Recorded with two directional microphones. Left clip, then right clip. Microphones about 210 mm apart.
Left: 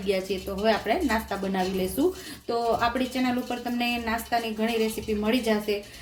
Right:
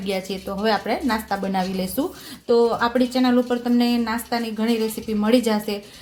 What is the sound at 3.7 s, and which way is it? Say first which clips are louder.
A woman's voice: right 5 dB; 35° right (ahead or behind).